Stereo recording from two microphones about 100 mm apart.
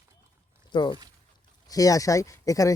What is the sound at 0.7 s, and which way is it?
Speech, 50° left (ahead or behind).